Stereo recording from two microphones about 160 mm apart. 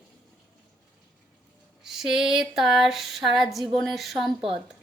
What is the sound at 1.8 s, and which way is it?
A woman's voice, centre (ahead or behind).